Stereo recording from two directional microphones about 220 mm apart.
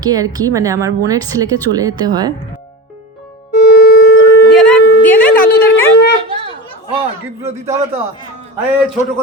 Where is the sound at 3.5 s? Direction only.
50° left (ahead or behind).